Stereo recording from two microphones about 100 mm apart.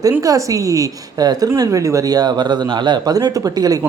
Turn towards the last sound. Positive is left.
turn(degrees=-40)  # may be behind; listen again after turning